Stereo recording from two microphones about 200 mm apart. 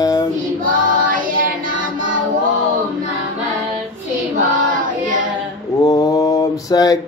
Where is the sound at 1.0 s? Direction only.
45° right (ahead or behind).